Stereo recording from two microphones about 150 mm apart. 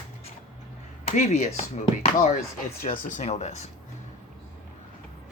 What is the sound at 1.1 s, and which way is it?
Speech, 50° left (ahead or behind).